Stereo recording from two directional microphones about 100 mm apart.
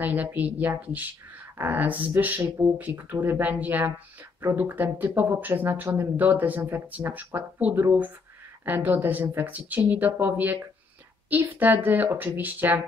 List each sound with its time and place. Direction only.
0.0 s speech: 15° right (ahead or behind)